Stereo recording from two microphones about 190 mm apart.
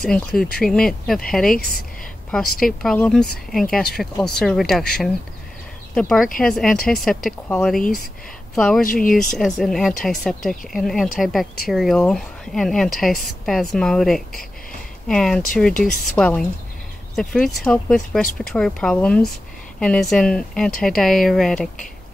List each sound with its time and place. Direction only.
0.0 s speech: centre (ahead or behind)
8.8 s speech: 45° left (ahead or behind)
9.1 s speech: centre (ahead or behind)